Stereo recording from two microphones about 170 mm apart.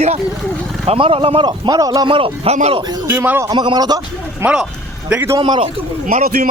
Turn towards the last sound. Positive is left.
turn(degrees=-60)  # may be behind; listen again after turning